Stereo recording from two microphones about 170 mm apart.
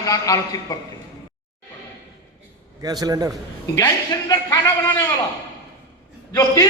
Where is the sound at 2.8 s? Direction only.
25° right (ahead or behind).